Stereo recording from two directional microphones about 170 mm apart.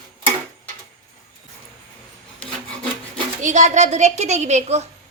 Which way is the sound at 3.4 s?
45° right (ahead or behind).